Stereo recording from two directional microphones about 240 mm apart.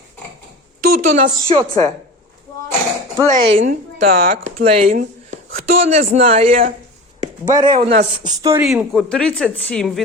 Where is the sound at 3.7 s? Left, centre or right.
Right.